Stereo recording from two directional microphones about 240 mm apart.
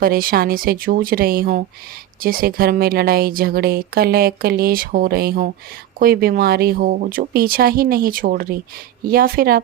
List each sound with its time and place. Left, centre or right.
0.0 s a woman's voice: right